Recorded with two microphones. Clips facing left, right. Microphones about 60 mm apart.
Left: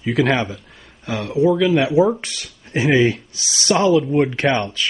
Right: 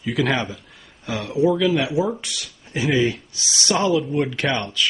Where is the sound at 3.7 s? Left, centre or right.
Centre.